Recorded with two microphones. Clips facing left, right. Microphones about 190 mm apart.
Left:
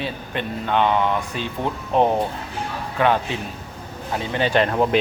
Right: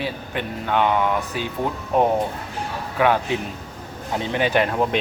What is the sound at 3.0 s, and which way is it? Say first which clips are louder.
A man's voice: right 1 dB; 10° right (ahead or behind).